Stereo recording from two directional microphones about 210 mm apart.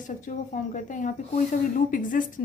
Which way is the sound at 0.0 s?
40° left (ahead or behind).